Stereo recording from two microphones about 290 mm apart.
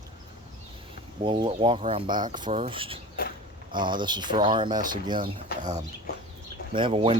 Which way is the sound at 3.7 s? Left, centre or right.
Centre.